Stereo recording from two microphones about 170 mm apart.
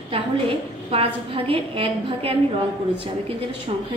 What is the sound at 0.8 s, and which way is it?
A woman's voice, 35° right (ahead or behind).